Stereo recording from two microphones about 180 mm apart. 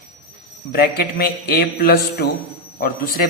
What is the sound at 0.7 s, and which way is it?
A man's voice, 55° left (ahead or behind).